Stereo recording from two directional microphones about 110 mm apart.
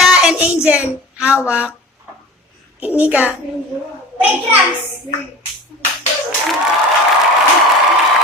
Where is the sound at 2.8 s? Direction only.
15° right (ahead or behind).